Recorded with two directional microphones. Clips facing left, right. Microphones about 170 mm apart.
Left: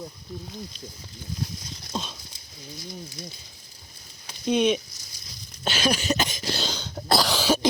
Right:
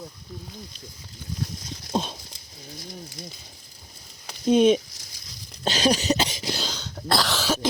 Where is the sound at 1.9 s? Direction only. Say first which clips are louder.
Right 6 dB; 55° right (ahead or behind).